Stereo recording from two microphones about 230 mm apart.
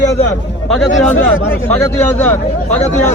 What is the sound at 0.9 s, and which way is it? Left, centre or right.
Speech, left.